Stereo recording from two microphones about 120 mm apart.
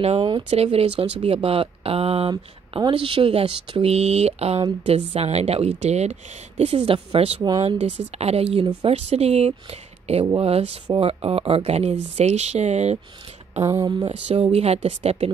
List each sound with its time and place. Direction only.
0.0 s speech: 55° right (ahead or behind)
6.6 s speech: 55° right (ahead or behind)
13.7 s a sound: 30° right (ahead or behind)
14.0 s speech: 55° right (ahead or behind)